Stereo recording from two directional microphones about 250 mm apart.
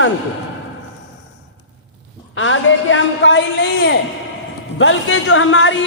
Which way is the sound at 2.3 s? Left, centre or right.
Left.